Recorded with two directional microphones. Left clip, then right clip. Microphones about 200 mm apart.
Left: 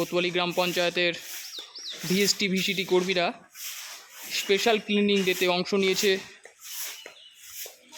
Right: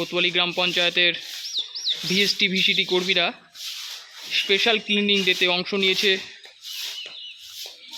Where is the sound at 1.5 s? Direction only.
20° left (ahead or behind).